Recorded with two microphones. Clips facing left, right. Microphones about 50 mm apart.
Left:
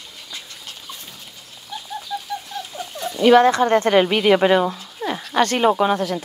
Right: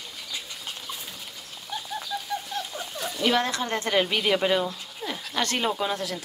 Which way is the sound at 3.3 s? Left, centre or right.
Left.